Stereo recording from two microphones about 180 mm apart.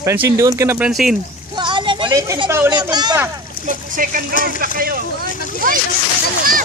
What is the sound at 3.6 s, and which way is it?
Speech, 50° right (ahead or behind).